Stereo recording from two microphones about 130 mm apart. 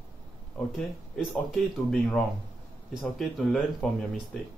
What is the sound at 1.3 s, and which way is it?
Speech, 5° left (ahead or behind).